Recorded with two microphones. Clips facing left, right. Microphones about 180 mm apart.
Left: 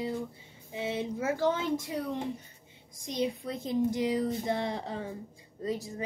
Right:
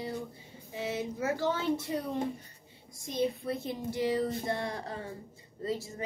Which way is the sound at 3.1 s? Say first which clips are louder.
Right 1 dB; 20° left (ahead or behind).